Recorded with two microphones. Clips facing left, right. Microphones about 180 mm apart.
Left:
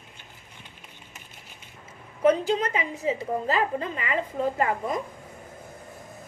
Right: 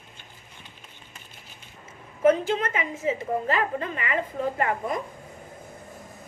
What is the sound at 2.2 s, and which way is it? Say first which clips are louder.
A woman's voice: even; 35° left (ahead or behind).